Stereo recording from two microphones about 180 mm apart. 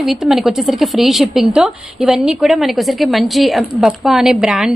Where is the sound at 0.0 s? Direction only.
Centre (ahead or behind).